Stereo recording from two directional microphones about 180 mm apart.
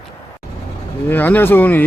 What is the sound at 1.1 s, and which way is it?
Speech, 10° left (ahead or behind).